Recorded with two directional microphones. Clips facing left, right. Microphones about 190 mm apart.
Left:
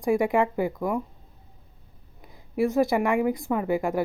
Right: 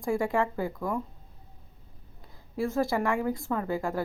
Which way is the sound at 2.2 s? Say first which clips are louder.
Left 6 dB; 15° left (ahead or behind).